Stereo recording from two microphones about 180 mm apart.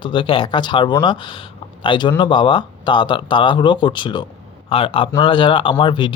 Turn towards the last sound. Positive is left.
turn(degrees=25)  # may be behind; listen again after turning